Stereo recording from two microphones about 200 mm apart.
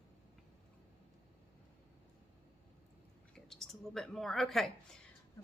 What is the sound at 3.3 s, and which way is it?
Speech, centre (ahead or behind).